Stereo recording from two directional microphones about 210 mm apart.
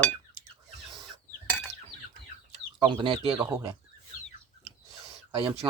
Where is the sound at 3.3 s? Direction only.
10° right (ahead or behind).